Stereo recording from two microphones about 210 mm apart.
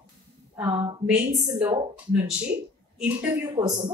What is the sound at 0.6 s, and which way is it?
Speech, 5° right (ahead or behind).